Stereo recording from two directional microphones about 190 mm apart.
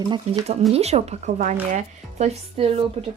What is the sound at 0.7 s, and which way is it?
Speech, 35° right (ahead or behind).